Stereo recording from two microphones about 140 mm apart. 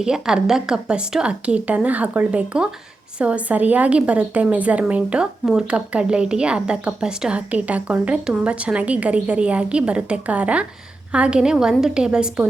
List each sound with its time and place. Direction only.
0.0 s a woman's voice: 5° right (ahead or behind)